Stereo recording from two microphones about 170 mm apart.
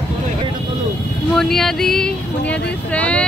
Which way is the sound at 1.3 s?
Centre (ahead or behind).